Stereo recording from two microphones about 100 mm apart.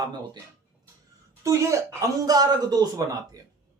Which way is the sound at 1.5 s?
30° right (ahead or behind).